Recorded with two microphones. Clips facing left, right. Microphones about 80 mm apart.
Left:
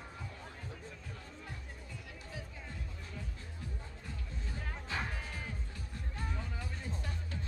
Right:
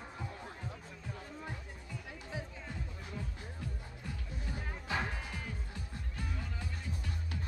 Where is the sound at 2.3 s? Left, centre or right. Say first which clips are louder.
Right 5 dB; centre.